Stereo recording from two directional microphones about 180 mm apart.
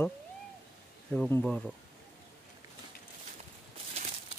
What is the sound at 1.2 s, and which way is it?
Speech, 10° left (ahead or behind).